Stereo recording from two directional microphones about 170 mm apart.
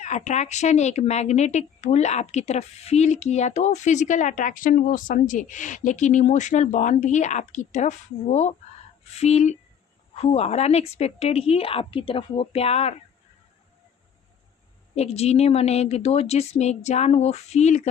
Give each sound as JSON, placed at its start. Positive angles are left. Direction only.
{"t": 0.0, "sound": "a woman's voice", "side_deg": 45}
{"t": 14.9, "sound": "a woman's voice", "side_deg": 40}